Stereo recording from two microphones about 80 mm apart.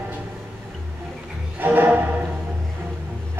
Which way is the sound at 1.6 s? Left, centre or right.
Right.